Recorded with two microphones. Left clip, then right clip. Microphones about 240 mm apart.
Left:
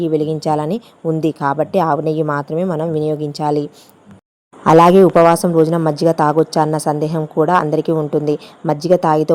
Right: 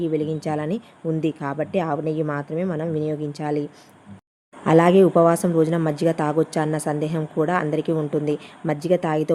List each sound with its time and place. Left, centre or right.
0.0 s a woman's voice: centre